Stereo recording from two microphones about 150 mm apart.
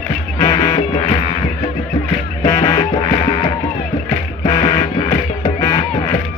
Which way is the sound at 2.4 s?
20° left (ahead or behind).